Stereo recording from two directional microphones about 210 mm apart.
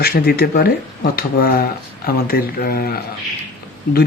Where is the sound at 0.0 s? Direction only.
50° left (ahead or behind).